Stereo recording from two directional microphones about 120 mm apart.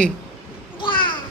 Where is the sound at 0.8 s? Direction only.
45° left (ahead or behind).